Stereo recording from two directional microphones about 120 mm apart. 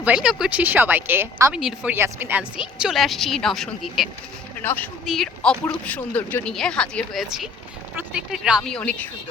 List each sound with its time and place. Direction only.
0.0 s a woman's voice: 5° right (ahead or behind)
0.6 s a woman's voice: 15° right (ahead or behind)
1.5 s a woman's voice: 5° right (ahead or behind)
2.0 s a woman's voice: 15° right (ahead or behind); by 4.1 s centre (ahead or behind)
4.6 s a woman's voice: 15° left (ahead or behind)
5.0 s a woman's voice: 5° left (ahead or behind)
8.6 s a woman's voice: 5° left (ahead or behind)